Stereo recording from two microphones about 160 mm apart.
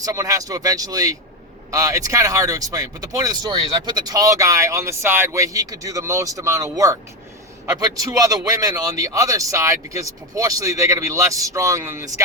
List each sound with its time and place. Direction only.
0.0 s speech: 20° right (ahead or behind)